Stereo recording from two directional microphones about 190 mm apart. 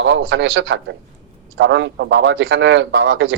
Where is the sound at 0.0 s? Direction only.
85° right.